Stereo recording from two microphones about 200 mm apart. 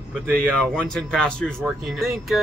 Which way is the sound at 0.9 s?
Centre (ahead or behind).